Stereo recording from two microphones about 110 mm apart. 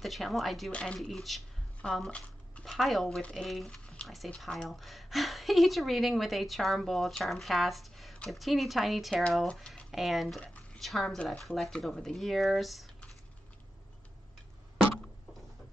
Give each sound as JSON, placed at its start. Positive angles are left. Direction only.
{"t": 0.0, "sound": "speech", "side_deg": 0}
{"t": 10.4, "sound": "a sound", "side_deg": 10}
{"t": 10.8, "sound": "speech", "side_deg": 0}